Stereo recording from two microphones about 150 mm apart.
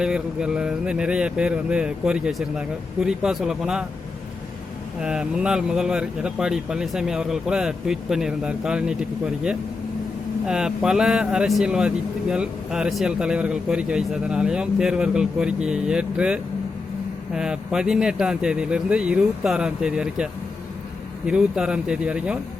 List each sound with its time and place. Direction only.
0.0 s speech: 5° right (ahead or behind)
4.9 s speech: 5° right (ahead or behind)